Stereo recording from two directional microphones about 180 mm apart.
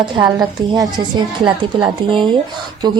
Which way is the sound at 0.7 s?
20° right (ahead or behind).